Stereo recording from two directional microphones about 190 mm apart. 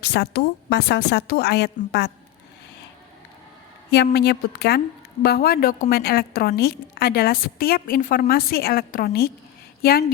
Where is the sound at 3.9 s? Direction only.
60° left (ahead or behind).